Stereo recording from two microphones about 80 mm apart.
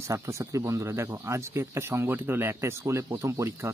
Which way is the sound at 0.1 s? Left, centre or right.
Right.